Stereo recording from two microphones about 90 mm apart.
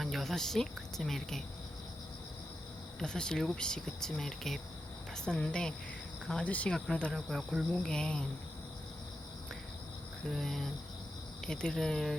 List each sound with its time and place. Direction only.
0.0 s speech: centre (ahead or behind)
3.0 s speech: 10° left (ahead or behind)
10.2 s speech: 5° left (ahead or behind)